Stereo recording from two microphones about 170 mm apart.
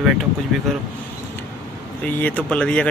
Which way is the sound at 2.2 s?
10° left (ahead or behind).